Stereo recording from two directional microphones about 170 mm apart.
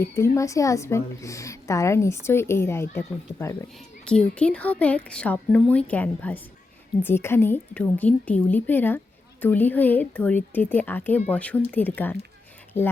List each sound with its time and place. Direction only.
0.1 s a woman's voice: 15° left (ahead or behind)